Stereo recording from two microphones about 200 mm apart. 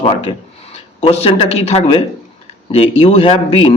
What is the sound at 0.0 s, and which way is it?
Speech, 25° left (ahead or behind).